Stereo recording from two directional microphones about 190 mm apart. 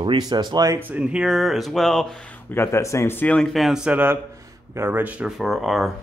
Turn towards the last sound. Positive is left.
turn(degrees=0)  # may be behind; listen again after turning